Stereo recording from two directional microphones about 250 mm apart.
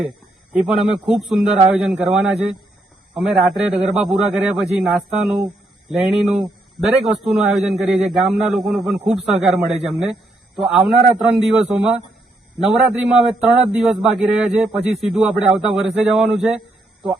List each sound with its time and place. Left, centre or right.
0.0 s a man's voice: centre